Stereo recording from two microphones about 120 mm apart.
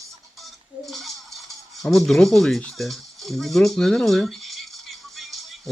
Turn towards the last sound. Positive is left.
turn(degrees=0)  # may be behind; listen again after turning